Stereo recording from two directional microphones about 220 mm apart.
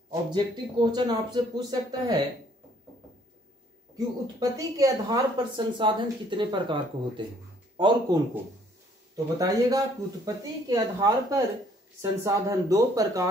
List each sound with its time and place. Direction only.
0.1 s speech: 20° right (ahead or behind)
4.4 s speech: 15° right (ahead or behind)